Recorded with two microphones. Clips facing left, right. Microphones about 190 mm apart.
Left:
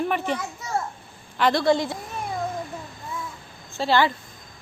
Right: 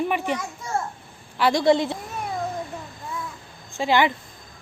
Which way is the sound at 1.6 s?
20° right (ahead or behind).